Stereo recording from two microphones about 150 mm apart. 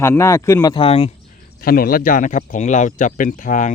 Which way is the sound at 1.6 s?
75° left (ahead or behind).